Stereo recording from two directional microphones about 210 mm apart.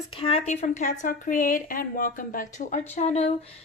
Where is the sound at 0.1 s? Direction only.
25° left (ahead or behind).